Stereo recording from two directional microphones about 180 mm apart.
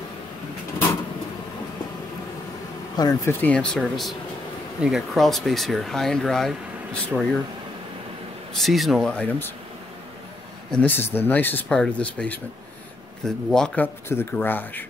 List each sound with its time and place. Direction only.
3.0 s speech: 15° left (ahead or behind)
8.5 s speech: centre (ahead or behind)
10.7 s speech: 10° left (ahead or behind)